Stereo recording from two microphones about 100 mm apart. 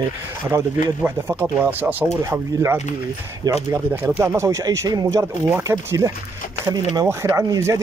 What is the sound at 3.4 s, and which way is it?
Speech, 40° right (ahead or behind).